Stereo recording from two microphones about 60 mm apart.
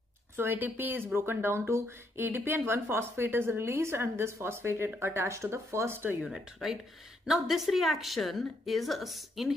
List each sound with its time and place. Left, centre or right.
0.4 s speech: right
6.3 s a woman's voice: centre